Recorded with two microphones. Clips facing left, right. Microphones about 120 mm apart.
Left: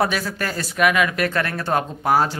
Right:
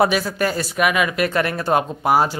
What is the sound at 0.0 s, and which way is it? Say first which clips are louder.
Speech: right 4 dB; 15° right (ahead or behind).